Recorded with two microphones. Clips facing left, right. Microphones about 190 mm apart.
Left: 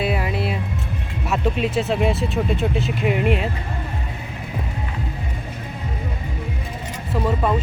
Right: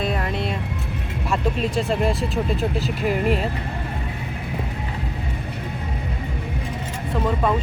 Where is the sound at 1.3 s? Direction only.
5° left (ahead or behind).